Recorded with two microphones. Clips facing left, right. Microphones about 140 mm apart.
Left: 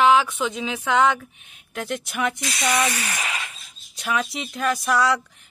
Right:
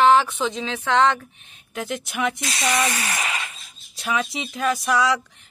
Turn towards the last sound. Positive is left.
turn(degrees=0)  # may be behind; listen again after turning